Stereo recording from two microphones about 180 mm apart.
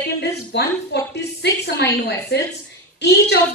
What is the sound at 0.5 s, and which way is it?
A woman's voice, 75° left (ahead or behind).